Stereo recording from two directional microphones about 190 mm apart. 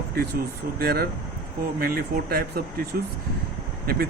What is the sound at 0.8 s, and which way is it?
Speech, 55° right (ahead or behind).